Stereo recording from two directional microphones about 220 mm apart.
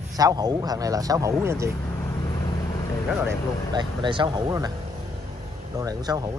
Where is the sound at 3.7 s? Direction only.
20° right (ahead or behind).